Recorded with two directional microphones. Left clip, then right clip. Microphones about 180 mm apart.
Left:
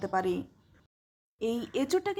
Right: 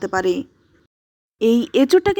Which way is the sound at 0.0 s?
30° right (ahead or behind).